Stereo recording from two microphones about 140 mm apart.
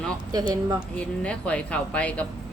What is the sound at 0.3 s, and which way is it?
Speech, 25° right (ahead or behind).